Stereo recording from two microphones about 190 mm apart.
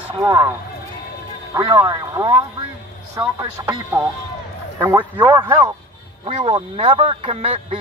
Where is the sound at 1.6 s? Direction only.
20° right (ahead or behind).